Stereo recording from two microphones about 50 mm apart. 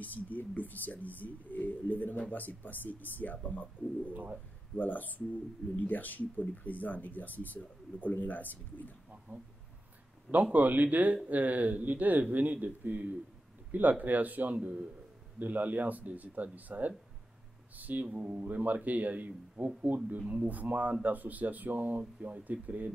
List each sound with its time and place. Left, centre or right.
0.0 s speech: left
4.1 s speech: right
4.7 s speech: left
9.3 s speech: right
18.0 s speech: right